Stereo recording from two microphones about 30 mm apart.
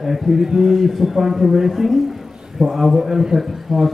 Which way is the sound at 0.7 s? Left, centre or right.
Centre.